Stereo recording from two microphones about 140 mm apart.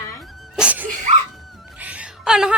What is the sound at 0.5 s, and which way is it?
Music, 10° right (ahead or behind).